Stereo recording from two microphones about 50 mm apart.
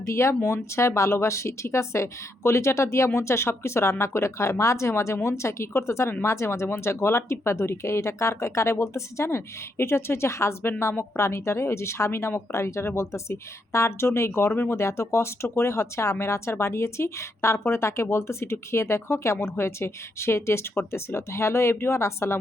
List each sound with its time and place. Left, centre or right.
0.0 s speech: left
3.2 s speech: left
10.6 s speech: left
11.2 s speech: left
14.8 s speech: left